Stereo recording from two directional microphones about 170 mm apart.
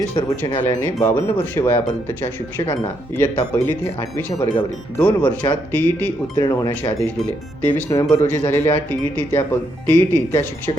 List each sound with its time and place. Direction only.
0.5 s speech: 15° left (ahead or behind)